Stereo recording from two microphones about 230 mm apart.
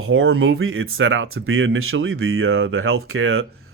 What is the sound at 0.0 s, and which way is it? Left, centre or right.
Speech, right.